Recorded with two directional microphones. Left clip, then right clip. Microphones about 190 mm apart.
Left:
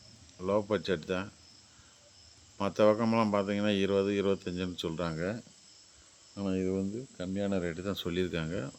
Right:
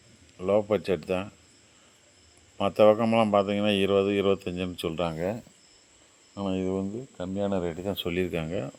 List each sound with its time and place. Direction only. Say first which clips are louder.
0.4 s speech: right 6 dB; 5° right (ahead or behind)
2.6 s speech: right 6 dB; 5° right (ahead or behind)